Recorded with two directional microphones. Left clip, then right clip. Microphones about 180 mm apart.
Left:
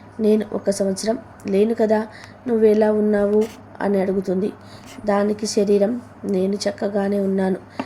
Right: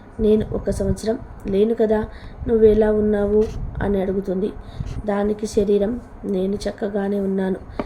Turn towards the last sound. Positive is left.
turn(degrees=10)  # may be behind; listen again after turning